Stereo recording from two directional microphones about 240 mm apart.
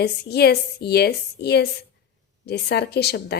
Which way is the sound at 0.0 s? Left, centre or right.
Left.